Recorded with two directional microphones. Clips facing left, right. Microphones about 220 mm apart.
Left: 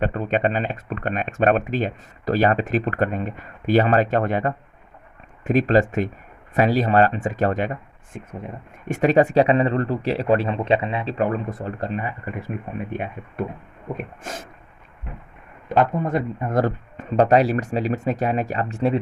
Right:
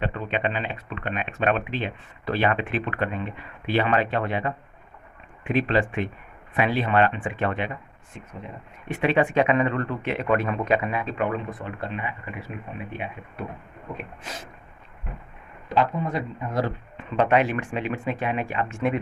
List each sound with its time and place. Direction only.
0.0 s speech: 45° left (ahead or behind)
8.9 s speech: 40° left (ahead or behind)
15.7 s speech: 50° left (ahead or behind); by 18.9 s 35° left (ahead or behind)